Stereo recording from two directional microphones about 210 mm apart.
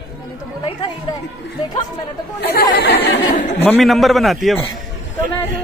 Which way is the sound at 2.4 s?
50° left (ahead or behind).